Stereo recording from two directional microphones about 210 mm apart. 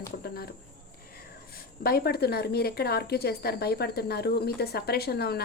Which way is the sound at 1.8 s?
50° left (ahead or behind).